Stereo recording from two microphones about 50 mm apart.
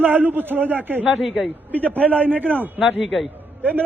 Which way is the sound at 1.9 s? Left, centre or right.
Right.